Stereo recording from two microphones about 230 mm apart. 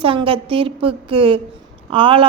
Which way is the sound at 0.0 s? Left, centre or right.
Right.